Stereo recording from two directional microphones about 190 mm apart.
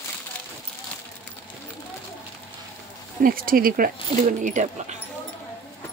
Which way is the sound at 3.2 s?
50° right (ahead or behind).